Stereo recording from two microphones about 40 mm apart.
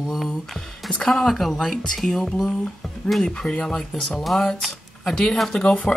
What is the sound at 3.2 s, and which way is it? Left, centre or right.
Speech, centre.